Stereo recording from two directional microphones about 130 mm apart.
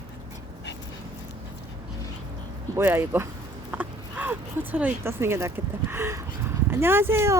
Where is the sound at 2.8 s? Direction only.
15° right (ahead or behind).